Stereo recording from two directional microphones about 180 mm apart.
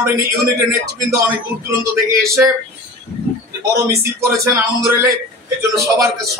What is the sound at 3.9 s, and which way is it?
Speech, 15° right (ahead or behind).